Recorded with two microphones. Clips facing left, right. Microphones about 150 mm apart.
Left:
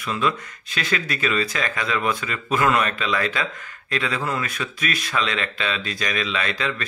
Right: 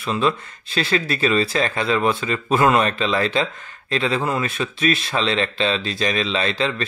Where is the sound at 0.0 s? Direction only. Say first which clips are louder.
Right 3 dB; 30° right (ahead or behind).